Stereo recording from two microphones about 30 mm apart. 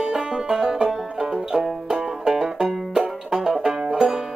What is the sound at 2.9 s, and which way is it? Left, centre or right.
Music, right.